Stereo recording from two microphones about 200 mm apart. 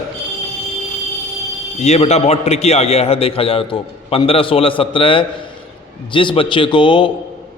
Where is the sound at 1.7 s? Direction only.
30° left (ahead or behind).